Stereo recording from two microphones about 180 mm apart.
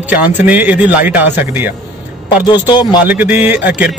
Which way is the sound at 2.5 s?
25° left (ahead or behind).